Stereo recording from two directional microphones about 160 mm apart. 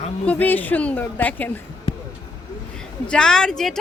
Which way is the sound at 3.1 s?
5° left (ahead or behind).